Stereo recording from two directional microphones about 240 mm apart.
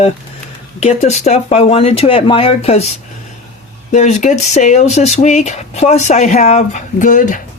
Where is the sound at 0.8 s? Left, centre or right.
Left.